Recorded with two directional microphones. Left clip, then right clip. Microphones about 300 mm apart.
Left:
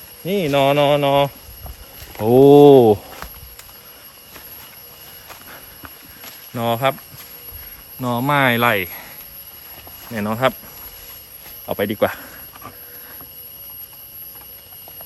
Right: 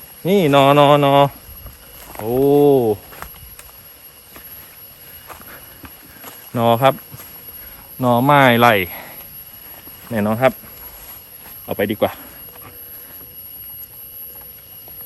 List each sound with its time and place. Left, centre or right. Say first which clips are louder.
0.3 s speech: right 4 dB; centre
2.4 s speech: left 5 dB; left
2.7 s speech: left 5 dB; left
6.5 s speech: right 5 dB; centre
8.0 s speech: right 5 dB; centre
11.6 s speech: even; centre